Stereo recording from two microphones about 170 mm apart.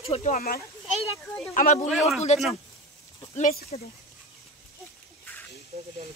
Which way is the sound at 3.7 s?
45° left (ahead or behind).